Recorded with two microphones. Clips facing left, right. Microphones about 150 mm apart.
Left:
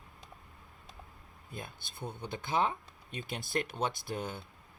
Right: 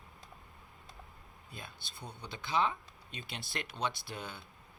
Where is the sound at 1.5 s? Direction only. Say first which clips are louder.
Left 5 dB; 50° left (ahead or behind).